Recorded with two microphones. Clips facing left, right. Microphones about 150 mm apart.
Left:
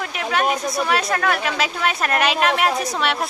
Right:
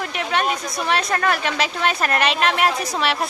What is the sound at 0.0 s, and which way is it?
A woman's voice, centre (ahead or behind).